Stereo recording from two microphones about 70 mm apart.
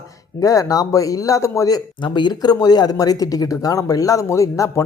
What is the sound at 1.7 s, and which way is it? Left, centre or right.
Speech, left.